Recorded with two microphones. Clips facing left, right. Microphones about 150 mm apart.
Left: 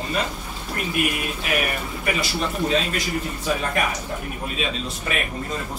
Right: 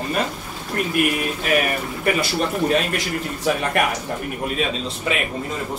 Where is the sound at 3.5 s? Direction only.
70° right (ahead or behind).